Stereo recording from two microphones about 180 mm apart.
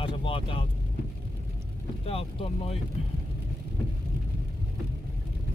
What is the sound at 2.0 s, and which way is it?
Speech, 30° left (ahead or behind).